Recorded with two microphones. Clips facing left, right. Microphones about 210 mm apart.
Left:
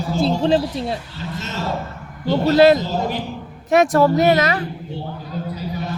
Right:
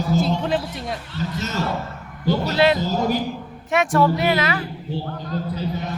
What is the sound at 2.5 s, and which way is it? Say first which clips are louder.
Speech: left 8 dB; 40° left (ahead or behind).